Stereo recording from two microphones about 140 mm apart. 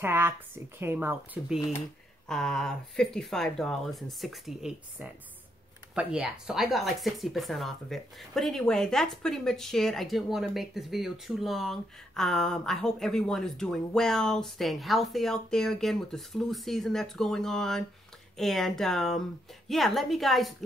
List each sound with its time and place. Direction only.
0.0 s speech: 15° right (ahead or behind)
2.2 s speech: 5° left (ahead or behind)